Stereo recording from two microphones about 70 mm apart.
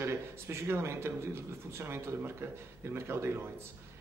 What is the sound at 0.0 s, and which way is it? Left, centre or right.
A man's voice, right.